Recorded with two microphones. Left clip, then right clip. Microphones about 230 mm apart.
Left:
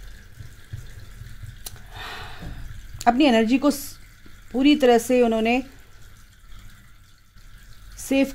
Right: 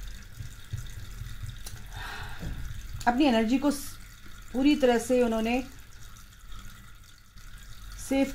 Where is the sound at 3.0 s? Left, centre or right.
Left.